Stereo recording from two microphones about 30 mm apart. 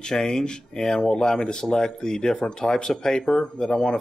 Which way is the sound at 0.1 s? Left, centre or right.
Centre.